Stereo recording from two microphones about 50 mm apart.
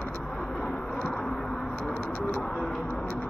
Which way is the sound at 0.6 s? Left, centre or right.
Centre.